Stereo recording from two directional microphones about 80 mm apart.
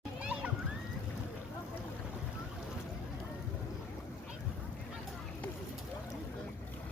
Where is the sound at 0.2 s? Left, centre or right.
Centre.